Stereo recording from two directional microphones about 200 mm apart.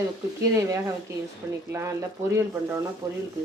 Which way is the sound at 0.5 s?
15° right (ahead or behind).